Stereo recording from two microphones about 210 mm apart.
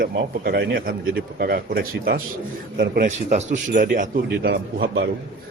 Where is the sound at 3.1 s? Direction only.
35° right (ahead or behind).